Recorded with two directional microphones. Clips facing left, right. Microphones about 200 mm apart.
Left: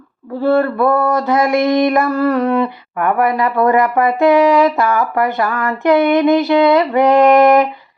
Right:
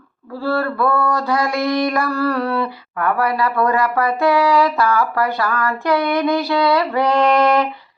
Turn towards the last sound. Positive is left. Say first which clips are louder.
# left 6 dB
turn(degrees=20)  # may be behind; listen again after turning